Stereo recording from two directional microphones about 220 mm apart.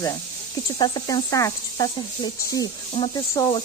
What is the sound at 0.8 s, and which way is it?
Speech, 20° left (ahead or behind).